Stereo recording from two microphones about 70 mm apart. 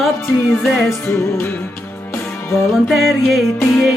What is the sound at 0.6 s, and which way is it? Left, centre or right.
Music, centre.